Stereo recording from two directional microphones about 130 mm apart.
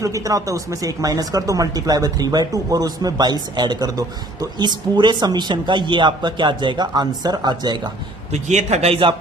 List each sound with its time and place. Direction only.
0.0 s speech: 25° right (ahead or behind)
8.3 s a man's voice: 60° right (ahead or behind); by 9.1 s 45° right (ahead or behind)